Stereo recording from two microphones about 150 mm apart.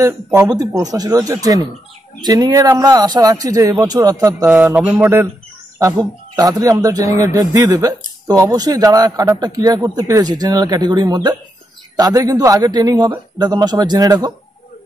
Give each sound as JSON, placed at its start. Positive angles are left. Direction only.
{"t": 0.0, "sound": "speech", "side_deg": -20}
{"t": 4.5, "sound": "speech", "side_deg": -10}